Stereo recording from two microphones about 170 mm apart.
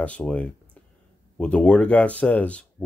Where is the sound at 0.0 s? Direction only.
10° left (ahead or behind).